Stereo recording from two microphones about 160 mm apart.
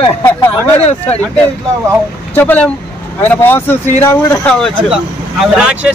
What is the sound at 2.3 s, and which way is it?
Speech, 10° left (ahead or behind).